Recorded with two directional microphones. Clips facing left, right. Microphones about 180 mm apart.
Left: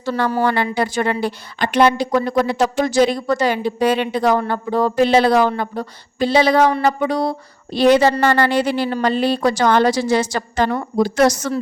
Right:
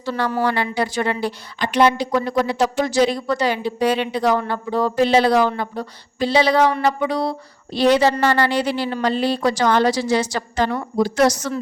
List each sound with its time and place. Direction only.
0.0 s a woman's voice: 50° left (ahead or behind)